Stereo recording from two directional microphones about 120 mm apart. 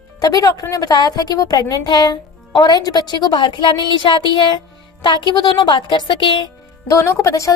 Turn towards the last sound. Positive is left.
turn(degrees=25)  # may be behind; listen again after turning